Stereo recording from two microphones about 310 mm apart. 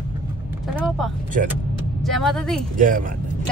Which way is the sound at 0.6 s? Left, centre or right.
Centre.